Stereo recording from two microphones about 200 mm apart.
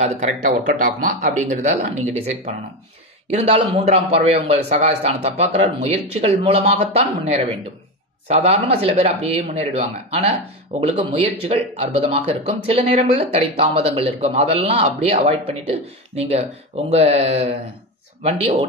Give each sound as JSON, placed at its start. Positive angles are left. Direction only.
{"t": 0.0, "sound": "speech", "side_deg": -35}
{"t": 8.3, "sound": "speech", "side_deg": -35}